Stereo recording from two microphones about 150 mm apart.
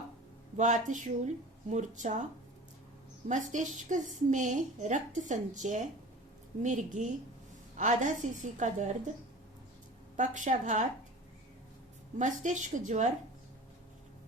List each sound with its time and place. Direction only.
0.5 s a woman's voice: 55° right (ahead or behind)
3.2 s a woman's voice: 55° right (ahead or behind)
10.2 s a woman's voice: 55° right (ahead or behind)
12.2 s a woman's voice: 55° right (ahead or behind)